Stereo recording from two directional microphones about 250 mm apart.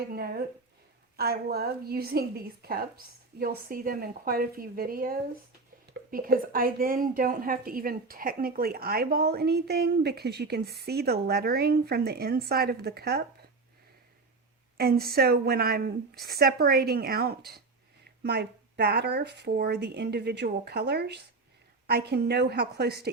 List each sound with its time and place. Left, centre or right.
0.1 s a woman's voice: right
14.8 s a woman's voice: right